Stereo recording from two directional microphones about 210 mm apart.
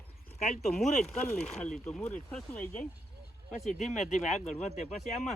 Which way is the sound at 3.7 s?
35° left (ahead or behind).